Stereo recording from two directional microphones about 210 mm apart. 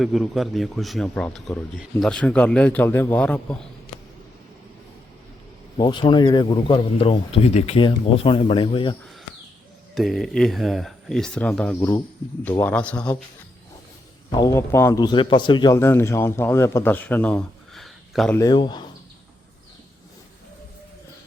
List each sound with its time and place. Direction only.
0.0 s speech: centre (ahead or behind)
5.7 s speech: 20° left (ahead or behind)
9.9 s speech: centre (ahead or behind)
14.3 s a man's voice: 20° left (ahead or behind); by 18.3 s centre (ahead or behind)
18.3 s speech: 20° left (ahead or behind)